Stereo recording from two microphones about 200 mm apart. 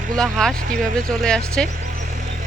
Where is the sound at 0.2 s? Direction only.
Centre (ahead or behind).